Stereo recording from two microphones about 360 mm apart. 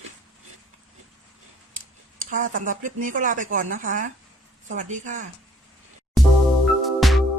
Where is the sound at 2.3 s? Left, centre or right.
Right.